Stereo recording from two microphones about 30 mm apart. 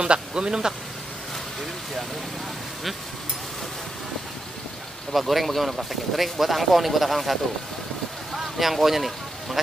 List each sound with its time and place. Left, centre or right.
0.0 s speech: right
5.1 s speech: centre
8.3 s a sound: centre